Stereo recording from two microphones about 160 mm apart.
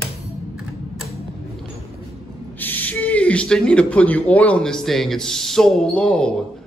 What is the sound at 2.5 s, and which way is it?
Speech, 10° left (ahead or behind).